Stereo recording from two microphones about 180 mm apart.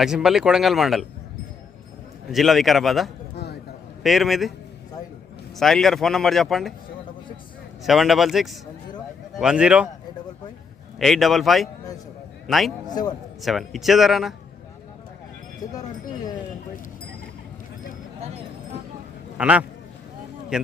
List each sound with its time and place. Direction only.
0.0 s speech: 5° right (ahead or behind)
2.3 s speech: centre (ahead or behind)
3.3 s a sound: 65° left (ahead or behind)
4.0 s speech: centre (ahead or behind)
5.5 s speech: centre (ahead or behind)
7.9 s speech: centre (ahead or behind)
11.0 s speech: centre (ahead or behind)
12.9 s a man's voice: 20° left (ahead or behind)
13.4 s speech: centre (ahead or behind)
15.6 s a man's voice: 20° left (ahead or behind)
19.4 s a man's voice: 5° right (ahead or behind)